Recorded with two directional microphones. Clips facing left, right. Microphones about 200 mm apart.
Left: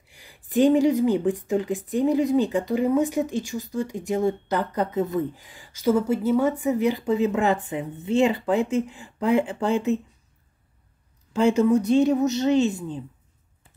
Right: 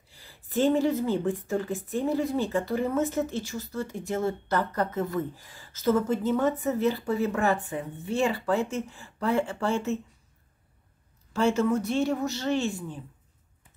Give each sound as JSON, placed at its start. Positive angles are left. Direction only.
{"t": 0.1, "sound": "speech", "side_deg": 15}
{"t": 11.3, "sound": "speech", "side_deg": 15}